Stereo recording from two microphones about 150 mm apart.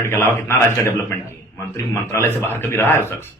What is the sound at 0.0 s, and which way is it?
A man's voice, 15° left (ahead or behind).